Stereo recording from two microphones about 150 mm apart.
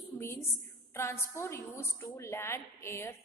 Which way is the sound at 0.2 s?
15° left (ahead or behind).